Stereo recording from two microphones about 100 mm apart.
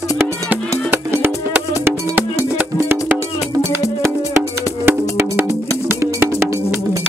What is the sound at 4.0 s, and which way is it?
Music, 30° right (ahead or behind).